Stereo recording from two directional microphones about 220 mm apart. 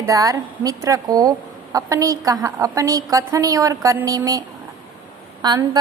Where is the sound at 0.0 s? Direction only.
15° right (ahead or behind).